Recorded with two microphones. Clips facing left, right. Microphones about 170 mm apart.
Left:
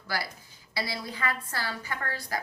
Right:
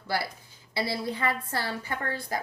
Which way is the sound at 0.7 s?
25° right (ahead or behind).